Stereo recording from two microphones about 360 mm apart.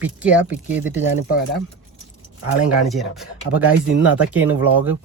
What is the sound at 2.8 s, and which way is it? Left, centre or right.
Speech, centre.